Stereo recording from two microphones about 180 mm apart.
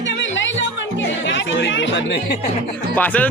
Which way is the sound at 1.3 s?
85° left.